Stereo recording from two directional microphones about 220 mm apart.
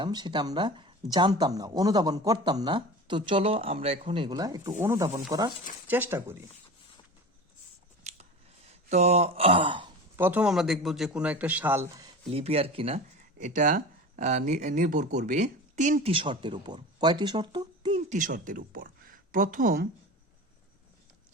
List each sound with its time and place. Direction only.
0.0 s a man's voice: 20° right (ahead or behind)
8.1 s scissors: 30° right (ahead or behind)
8.7 s speech: 30° right (ahead or behind)
10.2 s a man's voice: 10° right (ahead or behind)
12.3 s speech: 25° right (ahead or behind)
18.1 s speech: 35° right (ahead or behind)